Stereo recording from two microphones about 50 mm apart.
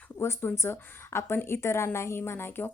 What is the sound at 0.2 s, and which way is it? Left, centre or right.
A woman's voice, left.